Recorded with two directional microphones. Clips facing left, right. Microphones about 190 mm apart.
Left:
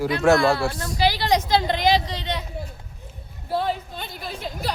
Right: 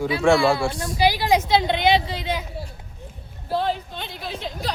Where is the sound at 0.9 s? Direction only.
15° right (ahead or behind).